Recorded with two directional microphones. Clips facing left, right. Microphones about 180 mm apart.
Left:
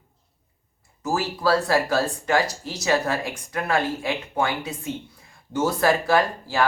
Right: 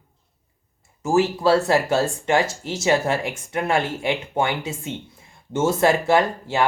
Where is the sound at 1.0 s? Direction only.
25° right (ahead or behind).